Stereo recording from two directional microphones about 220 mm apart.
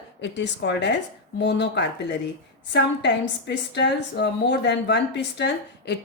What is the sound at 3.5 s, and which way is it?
Speech, 50° left (ahead or behind).